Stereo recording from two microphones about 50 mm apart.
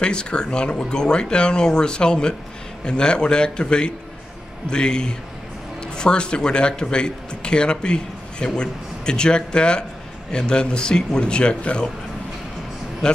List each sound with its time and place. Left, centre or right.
0.0 s speech: centre
13.0 s speech: centre